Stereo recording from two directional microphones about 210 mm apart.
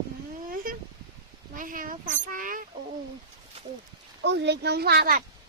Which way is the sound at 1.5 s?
40° right (ahead or behind).